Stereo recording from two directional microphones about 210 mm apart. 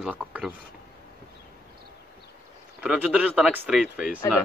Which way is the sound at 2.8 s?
5° right (ahead or behind).